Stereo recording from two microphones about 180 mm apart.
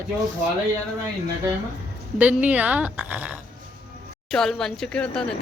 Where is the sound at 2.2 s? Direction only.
10° right (ahead or behind).